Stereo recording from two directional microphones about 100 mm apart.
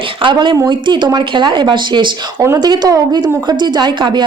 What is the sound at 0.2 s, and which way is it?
A woman's voice, 55° right (ahead or behind).